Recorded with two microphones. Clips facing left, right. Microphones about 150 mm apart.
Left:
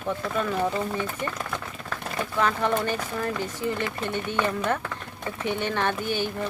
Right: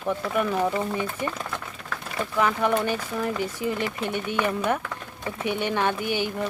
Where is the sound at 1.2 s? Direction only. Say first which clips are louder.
Right 2 dB; 15° right (ahead or behind).